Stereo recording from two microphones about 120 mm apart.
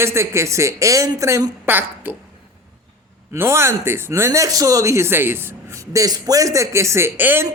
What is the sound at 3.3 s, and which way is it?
Speech, 20° right (ahead or behind).